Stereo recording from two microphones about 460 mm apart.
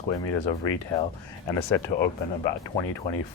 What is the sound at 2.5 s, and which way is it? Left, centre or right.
Speech, left.